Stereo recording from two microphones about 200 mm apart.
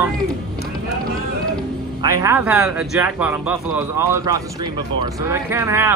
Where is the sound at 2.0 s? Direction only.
15° right (ahead or behind).